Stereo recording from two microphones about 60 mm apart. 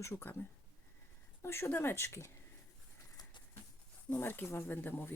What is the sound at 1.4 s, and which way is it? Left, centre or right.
Speech, left.